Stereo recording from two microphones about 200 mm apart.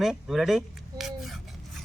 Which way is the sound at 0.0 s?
Centre (ahead or behind).